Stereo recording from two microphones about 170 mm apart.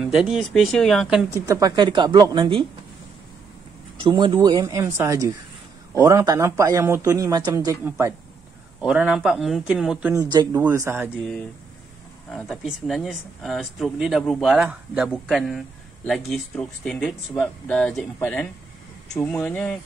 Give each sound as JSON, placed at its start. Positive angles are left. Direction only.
{"t": 0.0, "sound": "speech", "side_deg": -5}
{"t": 1.3, "sound": "a woman's voice", "side_deg": -20}
{"t": 4.0, "sound": "a woman's voice", "side_deg": -25}
{"t": 8.8, "sound": "speech", "side_deg": -5}
{"t": 10.1, "sound": "a woman's voice", "side_deg": -20}
{"t": 12.3, "sound": "speech", "side_deg": 0}